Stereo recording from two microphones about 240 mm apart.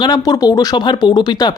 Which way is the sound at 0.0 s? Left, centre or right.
Centre.